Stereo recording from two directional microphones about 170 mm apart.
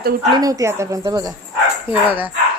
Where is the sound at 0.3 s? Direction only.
20° right (ahead or behind).